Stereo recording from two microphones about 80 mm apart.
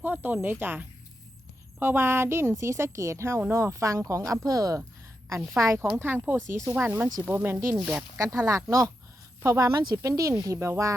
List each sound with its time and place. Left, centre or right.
0.0 s speech: right
5.5 s speech: right
7.8 s speech: centre
8.2 s speech: right